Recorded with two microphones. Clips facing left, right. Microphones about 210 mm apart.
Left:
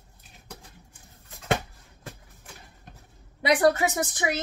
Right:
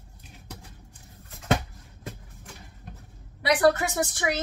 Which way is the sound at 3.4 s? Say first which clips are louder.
Even; 20° left (ahead or behind).